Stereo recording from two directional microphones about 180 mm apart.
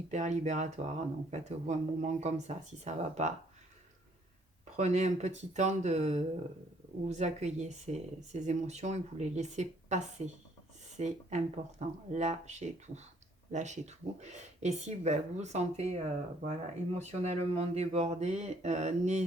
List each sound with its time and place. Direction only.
0.1 s speech: 40° right (ahead or behind)
4.8 s speech: 40° right (ahead or behind)